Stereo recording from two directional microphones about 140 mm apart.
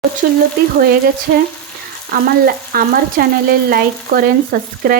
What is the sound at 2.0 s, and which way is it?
Frying, 90° right.